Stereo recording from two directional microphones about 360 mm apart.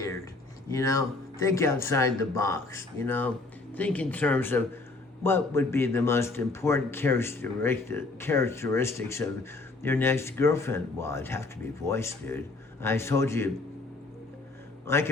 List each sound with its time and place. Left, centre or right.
0.7 s a man's voice: centre
14.8 s a man's voice: centre